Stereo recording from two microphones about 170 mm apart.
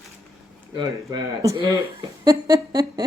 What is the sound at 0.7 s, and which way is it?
A woman's voice, 20° right (ahead or behind).